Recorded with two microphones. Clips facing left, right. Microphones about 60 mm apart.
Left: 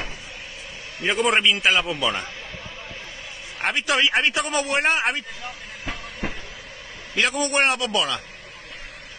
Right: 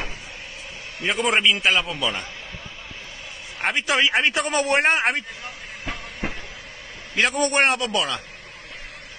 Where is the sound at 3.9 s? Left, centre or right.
Centre.